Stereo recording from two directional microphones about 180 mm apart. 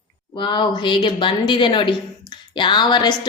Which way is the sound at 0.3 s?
25° left (ahead or behind).